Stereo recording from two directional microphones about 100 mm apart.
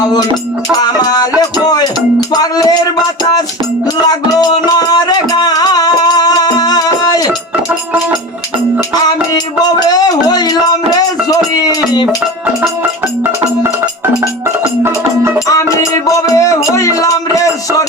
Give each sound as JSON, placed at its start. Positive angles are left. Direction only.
{"t": 0.7, "sound": "music", "side_deg": 40}
{"t": 4.0, "sound": "music", "side_deg": 45}
{"t": 9.6, "sound": "a sound", "side_deg": 45}
{"t": 12.8, "sound": "music", "side_deg": -25}
{"t": 15.4, "sound": "music", "side_deg": 35}
{"t": 16.6, "sound": "a sound", "side_deg": 35}